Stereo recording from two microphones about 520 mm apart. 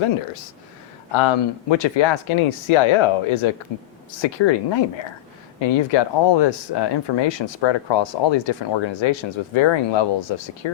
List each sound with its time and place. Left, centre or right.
1.1 s speech: left